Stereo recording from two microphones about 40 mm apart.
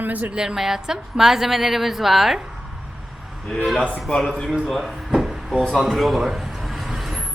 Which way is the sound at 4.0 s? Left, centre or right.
Centre.